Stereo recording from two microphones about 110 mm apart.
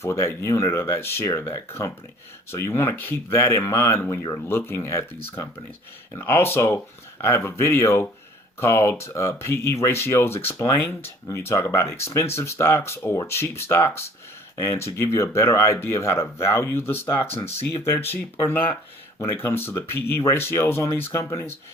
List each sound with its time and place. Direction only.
0.0 s speech: 25° left (ahead or behind)